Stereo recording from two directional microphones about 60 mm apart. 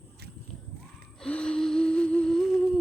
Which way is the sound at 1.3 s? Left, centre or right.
Centre.